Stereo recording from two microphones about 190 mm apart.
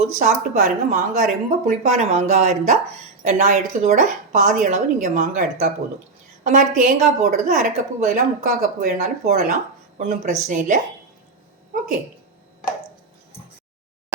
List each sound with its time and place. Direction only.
0.0 s speech: 40° right (ahead or behind)
10.0 s speech: 50° right (ahead or behind)